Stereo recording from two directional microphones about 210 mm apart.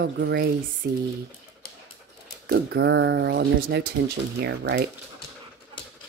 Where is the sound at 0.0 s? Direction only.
50° right (ahead or behind).